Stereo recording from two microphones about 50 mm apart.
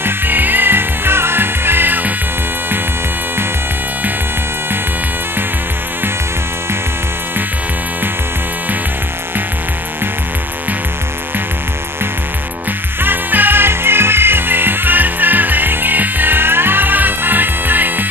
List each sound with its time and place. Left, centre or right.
0.0 s music: right
13.0 s music: right